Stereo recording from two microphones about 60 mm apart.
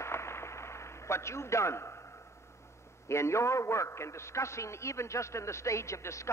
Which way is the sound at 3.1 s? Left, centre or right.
Left.